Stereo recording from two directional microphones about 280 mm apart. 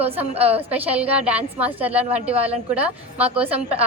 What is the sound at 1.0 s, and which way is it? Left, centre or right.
A woman's voice, centre.